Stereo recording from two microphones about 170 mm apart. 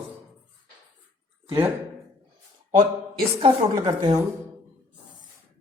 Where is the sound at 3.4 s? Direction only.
30° right (ahead or behind).